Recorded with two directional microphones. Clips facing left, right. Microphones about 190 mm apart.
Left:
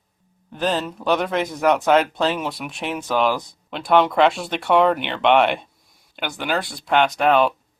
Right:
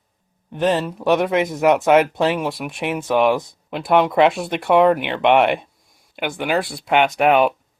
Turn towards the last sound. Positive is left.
turn(degrees=-10)  # may be behind; listen again after turning